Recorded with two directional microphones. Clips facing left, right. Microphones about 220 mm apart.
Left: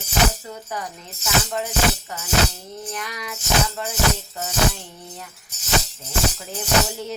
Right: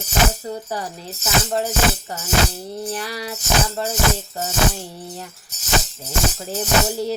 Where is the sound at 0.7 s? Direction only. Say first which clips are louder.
Right 4 dB; 35° right (ahead or behind).